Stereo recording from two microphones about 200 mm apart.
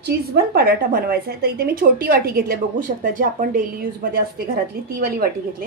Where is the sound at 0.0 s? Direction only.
50° right (ahead or behind).